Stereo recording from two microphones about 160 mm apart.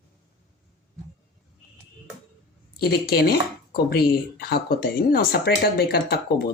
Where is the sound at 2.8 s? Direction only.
80° left.